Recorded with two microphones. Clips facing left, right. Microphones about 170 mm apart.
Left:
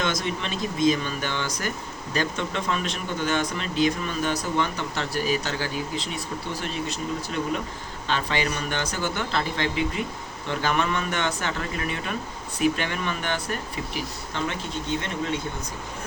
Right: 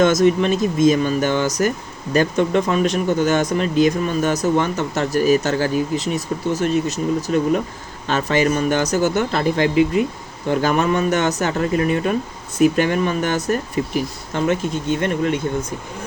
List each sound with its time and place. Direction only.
0.0 s speech: 45° right (ahead or behind)